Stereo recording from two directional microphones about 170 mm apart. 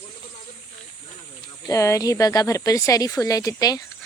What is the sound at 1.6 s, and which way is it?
Speech, 20° left (ahead or behind).